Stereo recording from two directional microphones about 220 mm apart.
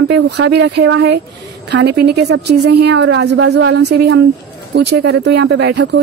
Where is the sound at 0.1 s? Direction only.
50° right (ahead or behind).